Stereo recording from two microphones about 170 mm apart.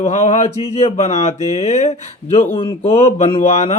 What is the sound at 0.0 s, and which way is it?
Speech, 45° left (ahead or behind).